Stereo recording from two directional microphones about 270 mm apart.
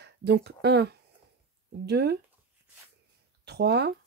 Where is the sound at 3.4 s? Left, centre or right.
Right.